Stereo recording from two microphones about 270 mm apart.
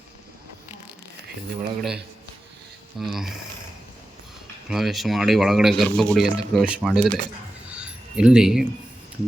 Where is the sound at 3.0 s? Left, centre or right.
Centre.